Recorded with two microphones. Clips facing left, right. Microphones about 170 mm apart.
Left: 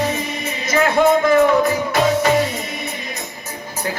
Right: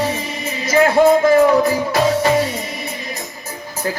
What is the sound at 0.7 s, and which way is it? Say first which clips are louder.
Music: right 3 dB; 30° right (ahead or behind).